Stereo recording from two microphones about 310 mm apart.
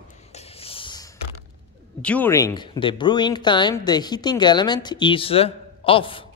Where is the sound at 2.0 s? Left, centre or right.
Centre.